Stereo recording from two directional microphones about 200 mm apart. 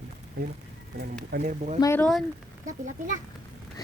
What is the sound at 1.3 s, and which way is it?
Speech, 40° right (ahead or behind).